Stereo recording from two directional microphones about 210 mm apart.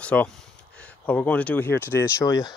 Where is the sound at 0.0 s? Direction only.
5° left (ahead or behind).